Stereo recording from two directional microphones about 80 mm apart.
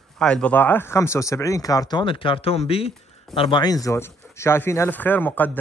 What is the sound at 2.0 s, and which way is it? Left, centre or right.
Speech, left.